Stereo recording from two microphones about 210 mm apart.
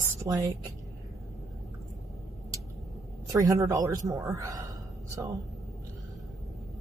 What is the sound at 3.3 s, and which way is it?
Speech, 15° right (ahead or behind).